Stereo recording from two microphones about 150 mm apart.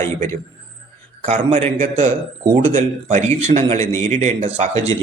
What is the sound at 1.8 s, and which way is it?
A man's voice, 45° right (ahead or behind).